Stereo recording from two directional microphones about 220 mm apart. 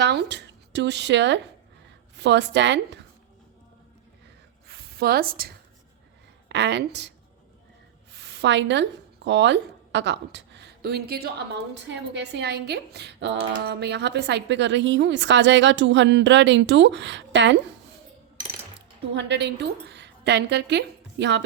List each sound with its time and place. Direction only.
0.0 s speech: 50° right (ahead or behind)
4.7 s a sound: 45° right (ahead or behind)
6.5 s speech: 50° right (ahead or behind)
8.1 s speech: 50° right (ahead or behind)
19.1 s a woman's voice: 50° right (ahead or behind)